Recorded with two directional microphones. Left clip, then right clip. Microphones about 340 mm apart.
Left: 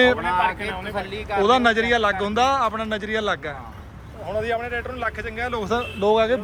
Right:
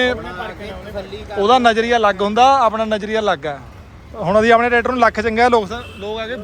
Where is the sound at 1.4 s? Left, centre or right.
Centre.